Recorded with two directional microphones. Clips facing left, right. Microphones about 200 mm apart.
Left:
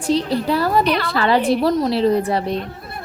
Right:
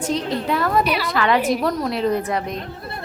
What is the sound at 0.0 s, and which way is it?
A woman's voice, 35° left (ahead or behind).